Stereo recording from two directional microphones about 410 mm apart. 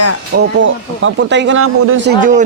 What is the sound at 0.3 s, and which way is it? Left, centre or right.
Speech, right.